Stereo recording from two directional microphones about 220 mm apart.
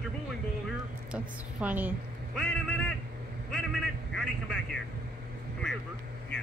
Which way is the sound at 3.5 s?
5° left (ahead or behind).